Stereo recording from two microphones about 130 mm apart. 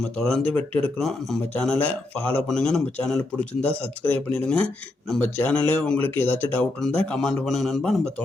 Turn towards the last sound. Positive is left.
turn(degrees=5)  # may be behind; listen again after turning